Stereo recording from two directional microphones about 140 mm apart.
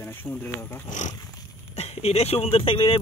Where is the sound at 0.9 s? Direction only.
60° left (ahead or behind).